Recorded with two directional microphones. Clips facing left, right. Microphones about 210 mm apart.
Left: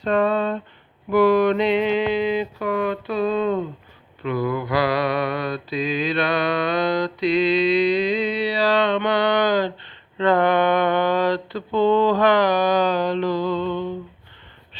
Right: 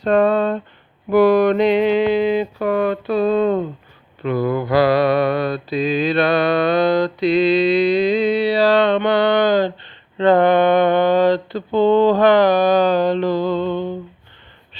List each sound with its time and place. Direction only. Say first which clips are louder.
0.0 s speech: right 5 dB; 40° right (ahead or behind)
1.1 s a sound: right 3 dB; 40° right (ahead or behind)
4.2 s mantra: right 4 dB; 40° right (ahead or behind)
13.4 s music: right 3 dB; 30° right (ahead or behind)